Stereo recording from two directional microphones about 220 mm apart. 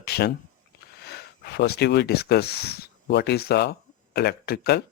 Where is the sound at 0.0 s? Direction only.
45° left (ahead or behind).